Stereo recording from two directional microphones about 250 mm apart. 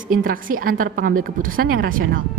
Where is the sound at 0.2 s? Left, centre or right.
Right.